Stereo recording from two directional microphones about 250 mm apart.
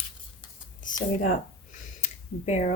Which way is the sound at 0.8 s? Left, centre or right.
Left.